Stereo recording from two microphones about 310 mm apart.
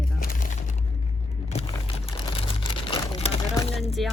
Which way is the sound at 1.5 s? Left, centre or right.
Centre.